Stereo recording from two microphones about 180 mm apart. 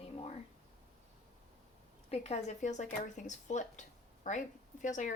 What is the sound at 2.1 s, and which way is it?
A woman's voice, 35° left (ahead or behind).